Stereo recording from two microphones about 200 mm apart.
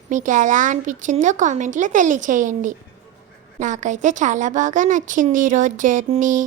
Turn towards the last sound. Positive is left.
turn(degrees=-40)  # may be behind; listen again after turning